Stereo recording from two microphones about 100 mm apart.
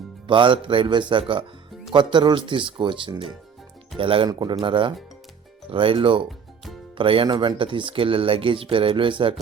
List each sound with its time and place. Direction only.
0.3 s speech: 55° right (ahead or behind)
4.3 s speech: 50° right (ahead or behind)